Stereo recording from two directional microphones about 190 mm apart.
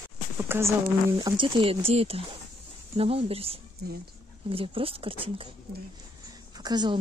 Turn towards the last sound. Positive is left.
turn(degrees=-20)  # may be behind; listen again after turning